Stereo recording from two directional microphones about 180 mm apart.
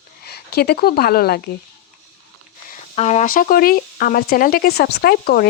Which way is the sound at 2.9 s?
40° left (ahead or behind).